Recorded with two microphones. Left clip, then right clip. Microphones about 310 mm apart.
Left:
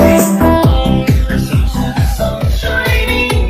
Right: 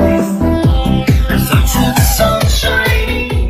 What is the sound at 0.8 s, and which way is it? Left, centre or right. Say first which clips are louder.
Music: left 1 dB; centre.